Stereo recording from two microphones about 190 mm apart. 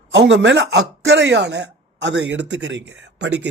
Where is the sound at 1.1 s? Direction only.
70° right (ahead or behind).